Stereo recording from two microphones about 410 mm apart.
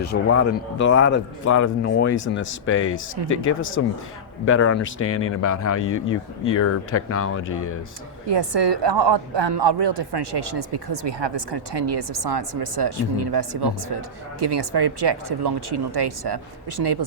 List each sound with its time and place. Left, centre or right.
0.0 s a man's voice: left
8.3 s a woman's voice: right